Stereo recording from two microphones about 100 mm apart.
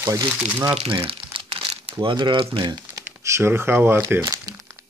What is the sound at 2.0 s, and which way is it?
Speech, 50° right (ahead or behind).